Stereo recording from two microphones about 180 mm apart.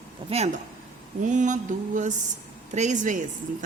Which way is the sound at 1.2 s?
45° right (ahead or behind).